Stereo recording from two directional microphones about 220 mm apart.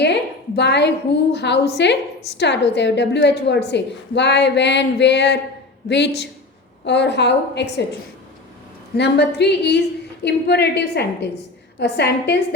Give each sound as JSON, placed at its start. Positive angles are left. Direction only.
{"t": 0.0, "sound": "a woman's voice", "side_deg": 50}
{"t": 9.0, "sound": "a woman's voice", "side_deg": 50}